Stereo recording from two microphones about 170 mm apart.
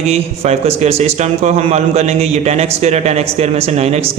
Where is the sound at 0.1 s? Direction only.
35° right (ahead or behind).